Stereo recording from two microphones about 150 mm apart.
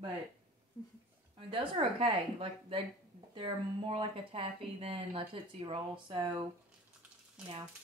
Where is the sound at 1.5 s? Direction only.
35° right (ahead or behind).